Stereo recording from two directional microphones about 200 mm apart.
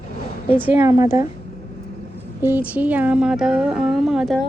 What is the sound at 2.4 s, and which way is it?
Speech, 10° right (ahead or behind).